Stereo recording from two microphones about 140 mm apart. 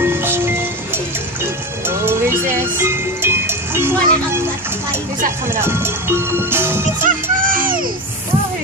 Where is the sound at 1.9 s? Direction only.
15° right (ahead or behind).